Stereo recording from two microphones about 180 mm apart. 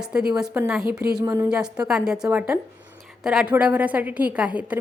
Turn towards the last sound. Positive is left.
turn(degrees=-5)  # may be behind; listen again after turning